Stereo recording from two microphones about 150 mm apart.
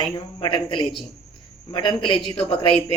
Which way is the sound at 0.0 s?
30° left (ahead or behind).